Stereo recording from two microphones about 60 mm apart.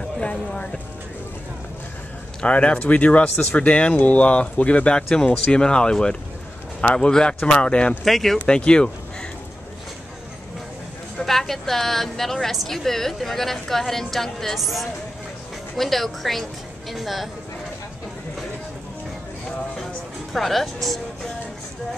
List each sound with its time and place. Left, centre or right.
0.5 s speech: centre
2.4 s speech: left
8.0 s a woman's voice: centre
8.5 s speech: centre
11.1 s a woman's voice: centre
20.3 s speech: centre